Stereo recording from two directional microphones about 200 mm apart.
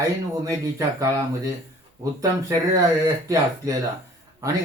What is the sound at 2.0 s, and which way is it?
Speech, 15° right (ahead or behind).